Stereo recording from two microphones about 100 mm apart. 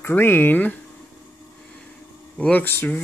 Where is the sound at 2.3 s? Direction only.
15° left (ahead or behind).